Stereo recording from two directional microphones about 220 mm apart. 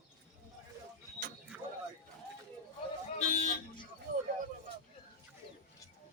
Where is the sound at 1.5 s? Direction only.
5° right (ahead or behind).